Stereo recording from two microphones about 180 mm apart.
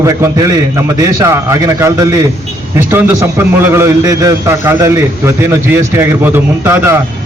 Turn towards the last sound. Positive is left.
turn(degrees=-15)  # may be behind; listen again after turning